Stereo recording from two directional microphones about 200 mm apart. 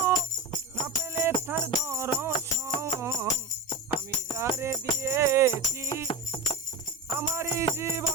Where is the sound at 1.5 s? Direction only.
10° right (ahead or behind).